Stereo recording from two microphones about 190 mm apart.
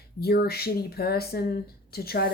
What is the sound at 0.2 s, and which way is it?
Speech, 55° left (ahead or behind).